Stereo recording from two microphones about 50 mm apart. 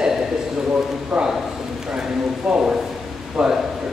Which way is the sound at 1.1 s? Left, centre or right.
Centre.